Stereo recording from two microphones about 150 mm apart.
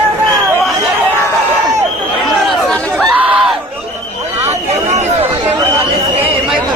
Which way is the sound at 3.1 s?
10° right (ahead or behind).